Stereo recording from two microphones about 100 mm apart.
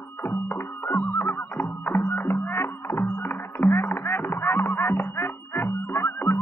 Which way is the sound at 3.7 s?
25° left (ahead or behind).